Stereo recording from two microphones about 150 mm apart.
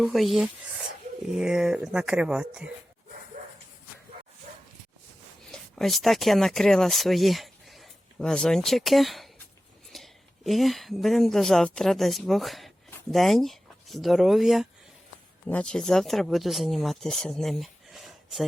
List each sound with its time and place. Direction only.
0.0 s speech: centre (ahead or behind)
3.4 s dog: 60° right (ahead or behind)
5.5 s speech: centre (ahead or behind)